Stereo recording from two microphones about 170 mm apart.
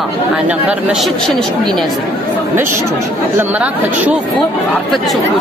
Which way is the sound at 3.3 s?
10° right (ahead or behind).